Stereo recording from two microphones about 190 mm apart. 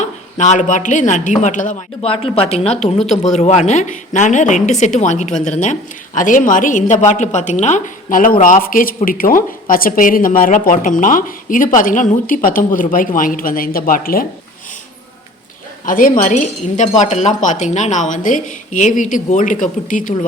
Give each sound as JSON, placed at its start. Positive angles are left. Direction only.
{"t": 0.0, "sound": "a woman's voice", "side_deg": 40}
{"t": 2.0, "sound": "a woman's voice", "side_deg": 30}
{"t": 3.0, "sound": "speech", "side_deg": 0}
{"t": 3.3, "sound": "a woman's voice", "side_deg": 35}
{"t": 15.9, "sound": "speech", "side_deg": 45}